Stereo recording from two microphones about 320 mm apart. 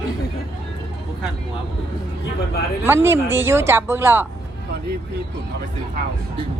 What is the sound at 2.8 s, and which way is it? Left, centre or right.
A woman's voice, centre.